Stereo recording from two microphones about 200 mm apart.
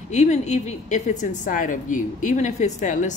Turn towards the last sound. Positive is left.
turn(degrees=40)  # may be behind; listen again after turning